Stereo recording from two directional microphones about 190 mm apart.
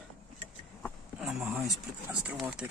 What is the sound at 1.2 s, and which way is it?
Speech, centre (ahead or behind).